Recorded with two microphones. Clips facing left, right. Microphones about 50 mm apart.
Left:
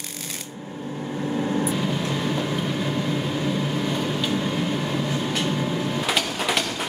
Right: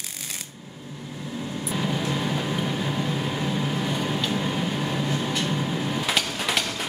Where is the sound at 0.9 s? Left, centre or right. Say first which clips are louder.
Left 8 dB; left.